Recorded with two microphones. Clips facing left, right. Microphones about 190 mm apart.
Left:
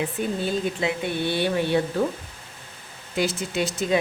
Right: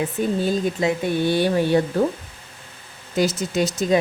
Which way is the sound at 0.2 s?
40° right (ahead or behind).